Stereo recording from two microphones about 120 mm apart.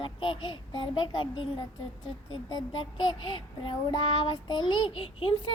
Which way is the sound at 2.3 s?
40° left (ahead or behind).